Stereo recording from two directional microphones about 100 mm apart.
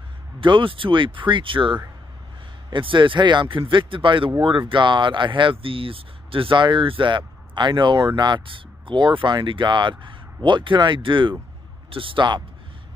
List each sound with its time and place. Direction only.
0.4 s speech: 60° right (ahead or behind)